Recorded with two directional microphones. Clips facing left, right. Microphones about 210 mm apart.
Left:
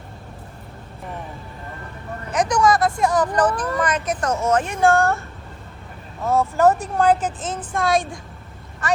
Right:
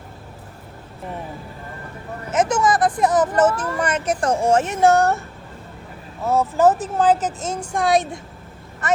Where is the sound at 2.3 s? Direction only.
25° right (ahead or behind).